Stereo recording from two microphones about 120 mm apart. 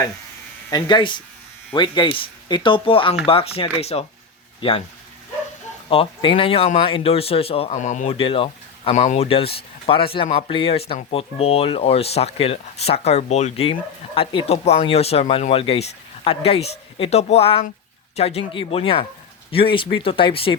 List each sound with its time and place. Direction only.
0.7 s speech: 40° left (ahead or behind); by 4.0 s 60° left (ahead or behind)
5.9 s speech: 50° left (ahead or behind)
7.8 s speech: 85° left
8.1 s speech: 50° left (ahead or behind)
9.0 s speech: 65° left (ahead or behind); by 20.6 s 45° left (ahead or behind)